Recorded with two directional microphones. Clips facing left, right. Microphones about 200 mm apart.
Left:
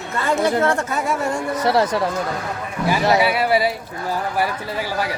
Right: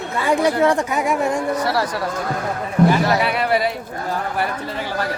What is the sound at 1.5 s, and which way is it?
Speech, 20° left (ahead or behind).